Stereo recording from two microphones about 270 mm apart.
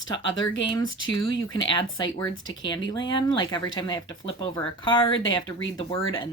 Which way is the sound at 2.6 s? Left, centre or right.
Centre.